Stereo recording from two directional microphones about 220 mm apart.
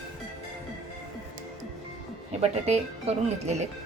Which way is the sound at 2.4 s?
30° right (ahead or behind).